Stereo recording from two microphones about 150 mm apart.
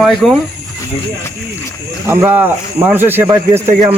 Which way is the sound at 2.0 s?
15° right (ahead or behind).